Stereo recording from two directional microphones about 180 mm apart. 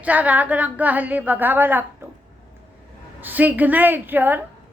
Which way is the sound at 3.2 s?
10° right (ahead or behind).